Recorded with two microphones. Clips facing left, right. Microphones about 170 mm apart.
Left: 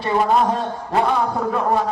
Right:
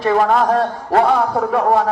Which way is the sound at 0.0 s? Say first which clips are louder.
Right 3 dB; 85° right.